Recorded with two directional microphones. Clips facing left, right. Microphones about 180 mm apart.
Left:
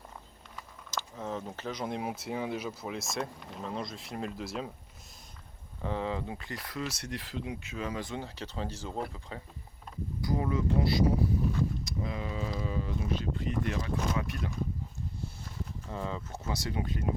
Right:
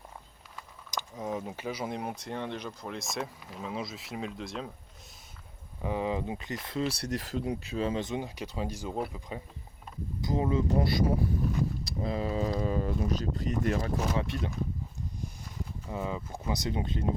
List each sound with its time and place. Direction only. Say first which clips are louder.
0.9 s speech: right 2 dB; 15° right (ahead or behind); by 4.7 s 5° left (ahead or behind)
5.8 s speech: right 2 dB; 15° right (ahead or behind)
10.7 s speech: right 1 dB; 50° right (ahead or behind)
11.9 s speech: right 4 dB; 35° right (ahead or behind)
14.2 s speech: right 3 dB; 25° right (ahead or behind)
15.9 s speech: right 2 dB; 15° right (ahead or behind)